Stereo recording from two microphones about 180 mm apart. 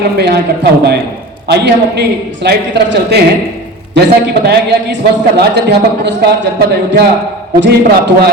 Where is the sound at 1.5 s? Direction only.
65° right (ahead or behind).